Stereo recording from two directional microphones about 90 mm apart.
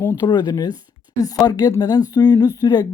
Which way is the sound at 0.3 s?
50° left (ahead or behind).